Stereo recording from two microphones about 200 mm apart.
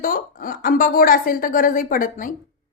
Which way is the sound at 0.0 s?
45° left (ahead or behind).